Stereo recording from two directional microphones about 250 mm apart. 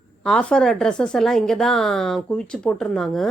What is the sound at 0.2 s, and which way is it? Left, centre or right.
Speech, centre.